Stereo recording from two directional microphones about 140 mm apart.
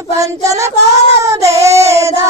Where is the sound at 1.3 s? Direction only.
20° right (ahead or behind).